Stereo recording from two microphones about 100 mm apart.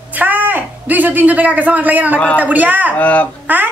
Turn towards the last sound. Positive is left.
turn(degrees=-15)  # may be behind; listen again after turning